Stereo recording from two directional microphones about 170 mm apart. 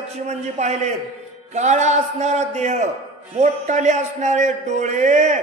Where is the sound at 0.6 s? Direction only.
40° right (ahead or behind).